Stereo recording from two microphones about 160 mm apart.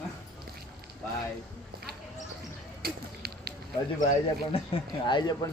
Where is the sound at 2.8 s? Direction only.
75° right (ahead or behind).